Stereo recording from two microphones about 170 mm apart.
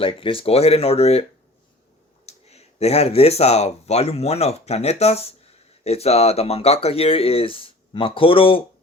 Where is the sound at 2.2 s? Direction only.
40° left (ahead or behind).